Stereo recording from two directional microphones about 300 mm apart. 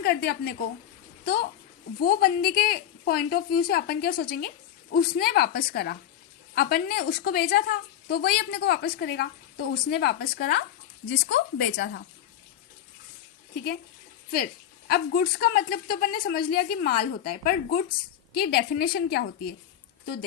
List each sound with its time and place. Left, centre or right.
0.0 s a woman's voice: left
14.3 s a woman's voice: left